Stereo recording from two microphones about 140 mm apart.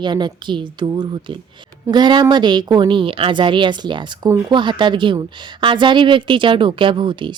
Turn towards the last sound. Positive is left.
turn(degrees=-35)  # may be behind; listen again after turning